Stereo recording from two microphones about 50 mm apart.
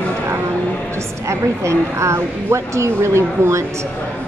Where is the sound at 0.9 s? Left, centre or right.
Right.